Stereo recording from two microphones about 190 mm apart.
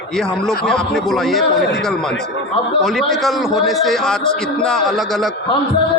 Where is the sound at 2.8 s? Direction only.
Centre (ahead or behind).